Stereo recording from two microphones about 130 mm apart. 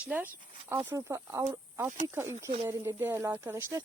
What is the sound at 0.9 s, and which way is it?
Speech, 20° right (ahead or behind).